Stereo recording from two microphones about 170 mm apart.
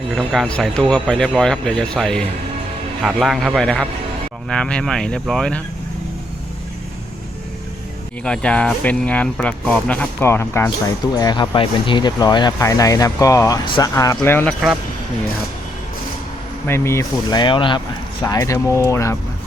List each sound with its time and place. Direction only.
0.2 s speech: centre (ahead or behind)
8.2 s speech: 5° left (ahead or behind)
16.6 s speech: 15° left (ahead or behind)
18.3 s speech: 20° left (ahead or behind)